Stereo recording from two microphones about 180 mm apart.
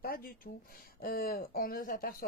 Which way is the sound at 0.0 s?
55° left (ahead or behind).